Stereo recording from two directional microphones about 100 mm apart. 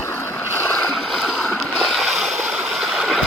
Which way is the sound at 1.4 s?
Centre (ahead or behind).